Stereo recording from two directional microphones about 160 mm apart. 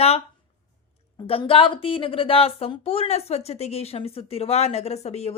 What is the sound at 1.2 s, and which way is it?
Speech, 35° left (ahead or behind).